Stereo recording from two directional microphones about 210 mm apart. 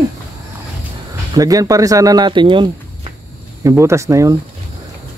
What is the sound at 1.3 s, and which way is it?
Speech, 15° right (ahead or behind).